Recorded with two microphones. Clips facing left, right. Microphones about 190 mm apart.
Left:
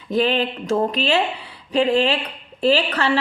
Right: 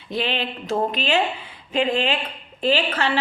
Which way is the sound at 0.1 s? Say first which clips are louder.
Left 6 dB; 40° left (ahead or behind).